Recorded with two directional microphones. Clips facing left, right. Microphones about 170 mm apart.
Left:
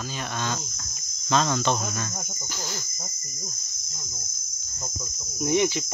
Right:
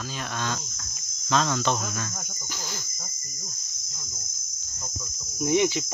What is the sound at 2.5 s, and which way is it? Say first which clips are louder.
Cricket: left 2 dB; 10° left (ahead or behind).